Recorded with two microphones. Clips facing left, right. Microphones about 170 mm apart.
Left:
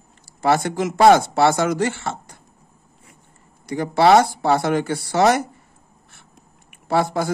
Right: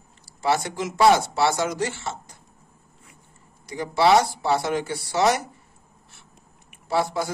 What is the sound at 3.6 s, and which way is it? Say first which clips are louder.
Speech: left 4 dB; 55° left (ahead or behind).